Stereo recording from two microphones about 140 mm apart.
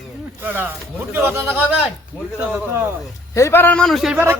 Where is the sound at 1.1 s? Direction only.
15° right (ahead or behind).